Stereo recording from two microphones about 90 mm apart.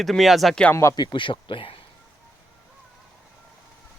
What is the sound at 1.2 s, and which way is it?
Speech, 70° left (ahead or behind).